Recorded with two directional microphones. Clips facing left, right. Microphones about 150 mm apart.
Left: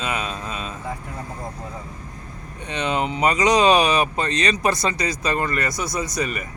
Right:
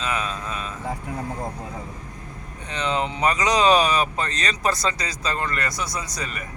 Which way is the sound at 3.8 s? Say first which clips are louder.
Left 2 dB; 70° left (ahead or behind).